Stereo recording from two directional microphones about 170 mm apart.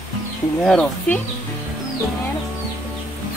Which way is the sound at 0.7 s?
5° left (ahead or behind).